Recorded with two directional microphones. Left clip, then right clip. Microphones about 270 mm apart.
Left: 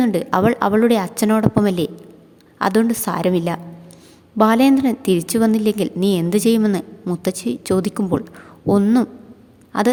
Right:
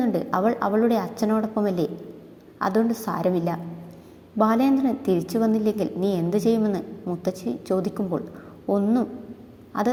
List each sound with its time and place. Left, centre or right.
0.0 s a woman's voice: left